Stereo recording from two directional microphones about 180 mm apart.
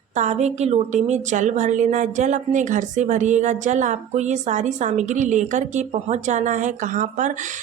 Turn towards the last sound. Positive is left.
turn(degrees=-40)  # may be behind; listen again after turning